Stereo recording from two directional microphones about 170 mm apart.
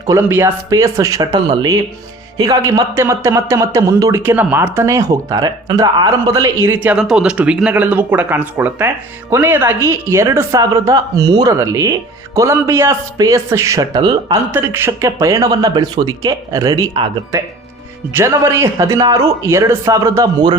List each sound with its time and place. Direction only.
0.0 s a woman's voice: 15° right (ahead or behind)
14.5 s a woman's voice: 15° right (ahead or behind)